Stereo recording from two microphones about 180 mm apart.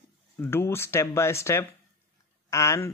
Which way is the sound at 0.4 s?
15° left (ahead or behind).